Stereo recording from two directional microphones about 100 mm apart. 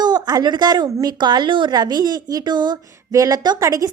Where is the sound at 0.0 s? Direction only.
45° right (ahead or behind).